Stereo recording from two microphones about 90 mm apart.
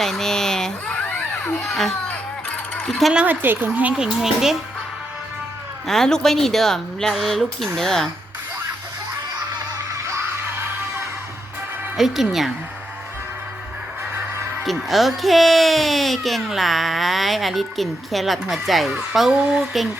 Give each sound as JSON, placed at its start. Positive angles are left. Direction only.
{"t": 0.0, "sound": "a sound", "side_deg": 5}
{"t": 1.6, "sound": "speech", "side_deg": 5}
{"t": 2.7, "sound": "a sound", "side_deg": 10}
{"t": 3.1, "sound": "speech", "side_deg": -10}
{"t": 3.4, "sound": "speech", "side_deg": -25}
{"t": 5.9, "sound": "speech", "side_deg": 5}
{"t": 11.9, "sound": "speech", "side_deg": -5}
{"t": 14.6, "sound": "speech", "side_deg": 0}